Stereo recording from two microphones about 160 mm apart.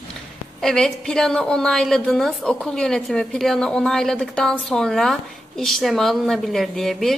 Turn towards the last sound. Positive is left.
turn(degrees=0)  # may be behind; listen again after turning